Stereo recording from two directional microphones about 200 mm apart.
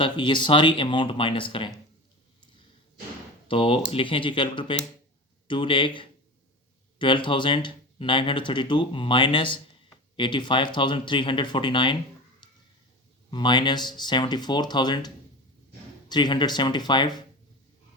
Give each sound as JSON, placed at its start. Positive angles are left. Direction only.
{"t": 0.0, "sound": "speech", "side_deg": 25}
{"t": 3.5, "sound": "speech", "side_deg": 25}
{"t": 13.3, "sound": "speech", "side_deg": 20}